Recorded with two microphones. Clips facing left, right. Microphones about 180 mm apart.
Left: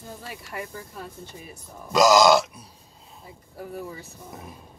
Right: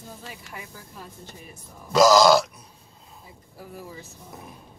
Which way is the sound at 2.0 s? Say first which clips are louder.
Right 1 dB; 20° left (ahead or behind).